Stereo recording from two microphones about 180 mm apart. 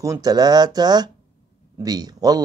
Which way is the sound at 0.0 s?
20° right (ahead or behind).